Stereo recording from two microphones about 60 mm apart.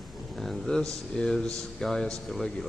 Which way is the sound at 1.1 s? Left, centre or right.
Centre.